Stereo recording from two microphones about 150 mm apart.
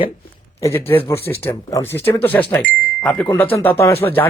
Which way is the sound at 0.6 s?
15° left (ahead or behind).